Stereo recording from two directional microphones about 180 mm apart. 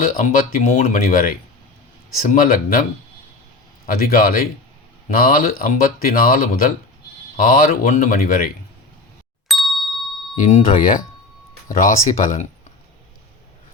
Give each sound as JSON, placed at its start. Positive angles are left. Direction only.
{"t": 0.0, "sound": "speech", "side_deg": 50}
{"t": 3.8, "sound": "speech", "side_deg": 50}
{"t": 9.5, "sound": "ding", "side_deg": 0}
{"t": 10.3, "sound": "speech", "side_deg": 40}